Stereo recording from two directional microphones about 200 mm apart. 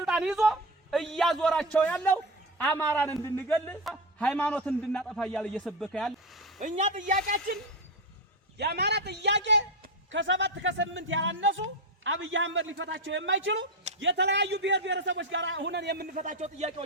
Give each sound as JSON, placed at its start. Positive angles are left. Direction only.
{"t": 0.0, "sound": "a man's voice", "side_deg": 0}
{"t": 6.6, "sound": "a man's voice", "side_deg": -35}
{"t": 8.5, "sound": "a man's voice", "side_deg": -55}